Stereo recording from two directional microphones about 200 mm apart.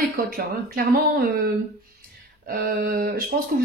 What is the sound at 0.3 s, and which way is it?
Speech, 45° right (ahead or behind).